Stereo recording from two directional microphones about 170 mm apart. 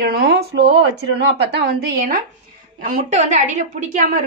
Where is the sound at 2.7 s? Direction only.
50° right (ahead or behind).